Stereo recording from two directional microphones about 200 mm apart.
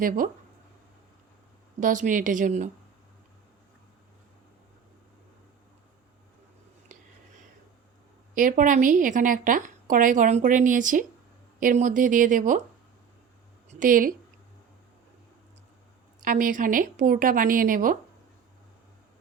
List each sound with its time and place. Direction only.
1.8 s a woman's voice: 40° right (ahead or behind)
6.9 s whispering: 40° right (ahead or behind)
8.4 s a woman's voice: 40° right (ahead or behind)
13.7 s a sound: 40° right (ahead or behind)
16.2 s a woman's voice: 45° right (ahead or behind)